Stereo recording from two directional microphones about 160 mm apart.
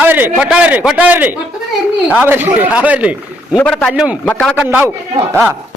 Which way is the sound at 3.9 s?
5° right (ahead or behind).